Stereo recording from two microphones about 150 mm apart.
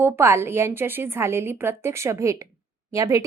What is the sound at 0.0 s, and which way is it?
A woman's voice, 20° right (ahead or behind).